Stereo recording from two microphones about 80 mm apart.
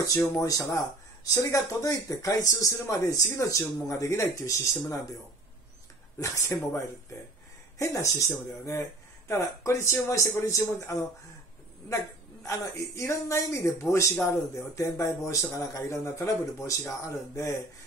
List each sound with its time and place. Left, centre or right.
0.0 s a man's voice: left
6.1 s a man's voice: left
7.8 s a man's voice: left
12.4 s a man's voice: left